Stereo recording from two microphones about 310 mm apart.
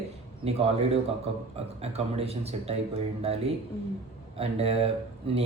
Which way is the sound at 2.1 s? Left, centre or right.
Centre.